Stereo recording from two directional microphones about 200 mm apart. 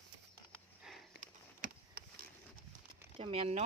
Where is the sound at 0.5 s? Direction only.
Centre (ahead or behind).